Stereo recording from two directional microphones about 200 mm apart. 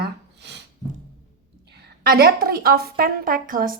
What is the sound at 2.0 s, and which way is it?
A woman's voice, 50° right (ahead or behind).